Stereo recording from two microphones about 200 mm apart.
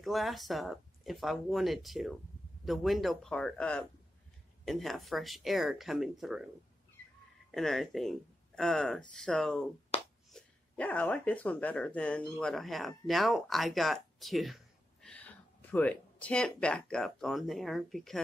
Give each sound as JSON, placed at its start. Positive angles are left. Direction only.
{"t": 0.0, "sound": "speech", "side_deg": 0}
{"t": 7.5, "sound": "speech", "side_deg": 0}
{"t": 9.9, "sound": "finger snapping", "side_deg": 30}
{"t": 10.3, "sound": "speech", "side_deg": 5}